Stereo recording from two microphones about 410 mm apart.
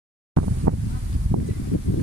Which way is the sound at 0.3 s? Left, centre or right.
Right.